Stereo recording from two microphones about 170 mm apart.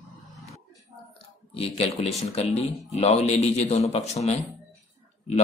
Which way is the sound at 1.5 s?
35° left (ahead or behind).